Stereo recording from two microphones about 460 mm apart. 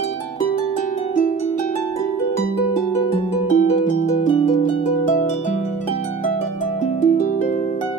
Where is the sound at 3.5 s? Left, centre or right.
Centre.